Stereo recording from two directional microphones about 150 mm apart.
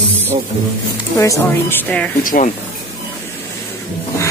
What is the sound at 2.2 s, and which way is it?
Speech, 65° left (ahead or behind).